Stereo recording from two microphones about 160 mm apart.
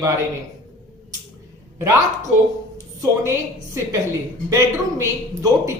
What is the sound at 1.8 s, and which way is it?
Speech, 15° right (ahead or behind).